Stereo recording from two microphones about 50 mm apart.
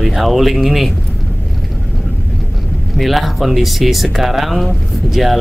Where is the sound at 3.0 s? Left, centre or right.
Centre.